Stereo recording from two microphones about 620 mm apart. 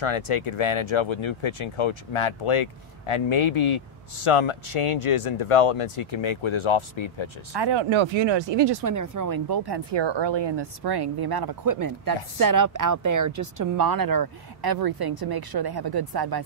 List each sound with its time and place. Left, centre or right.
0.0 s speech: left
7.5 s speech: right
8.9 s speech: right